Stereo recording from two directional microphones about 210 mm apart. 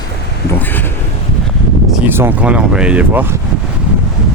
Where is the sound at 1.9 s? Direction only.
10° right (ahead or behind).